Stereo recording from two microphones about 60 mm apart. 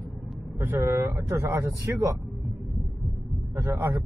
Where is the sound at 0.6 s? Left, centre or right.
Right.